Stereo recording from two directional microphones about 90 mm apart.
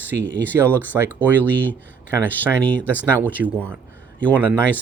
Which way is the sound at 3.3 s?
20° right (ahead or behind).